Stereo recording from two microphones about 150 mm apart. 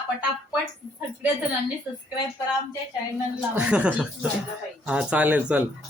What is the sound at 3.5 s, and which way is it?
Speech, 10° right (ahead or behind).